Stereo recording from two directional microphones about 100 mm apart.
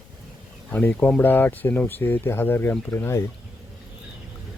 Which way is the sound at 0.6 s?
15° left (ahead or behind).